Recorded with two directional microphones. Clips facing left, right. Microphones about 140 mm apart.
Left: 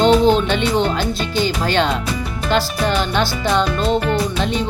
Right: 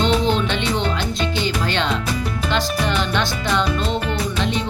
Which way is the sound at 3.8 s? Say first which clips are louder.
Left 5 dB; centre (ahead or behind).